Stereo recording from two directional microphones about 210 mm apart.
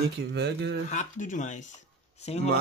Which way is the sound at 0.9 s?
35° left (ahead or behind).